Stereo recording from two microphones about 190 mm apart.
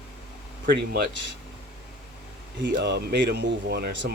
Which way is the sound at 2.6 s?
65° right (ahead or behind).